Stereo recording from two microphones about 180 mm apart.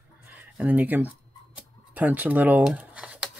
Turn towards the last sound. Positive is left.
turn(degrees=-5)  # may be behind; listen again after turning